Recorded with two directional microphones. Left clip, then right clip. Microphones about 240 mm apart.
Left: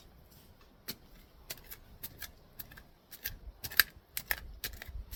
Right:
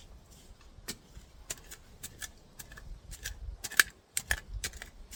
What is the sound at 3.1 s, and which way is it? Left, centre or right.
Scissors, centre.